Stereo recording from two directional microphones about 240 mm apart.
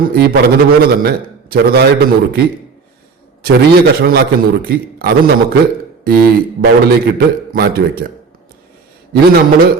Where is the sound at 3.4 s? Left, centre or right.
Right.